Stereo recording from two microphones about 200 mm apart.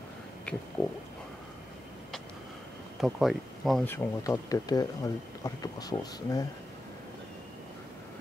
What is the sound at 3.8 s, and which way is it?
Speech, 15° left (ahead or behind).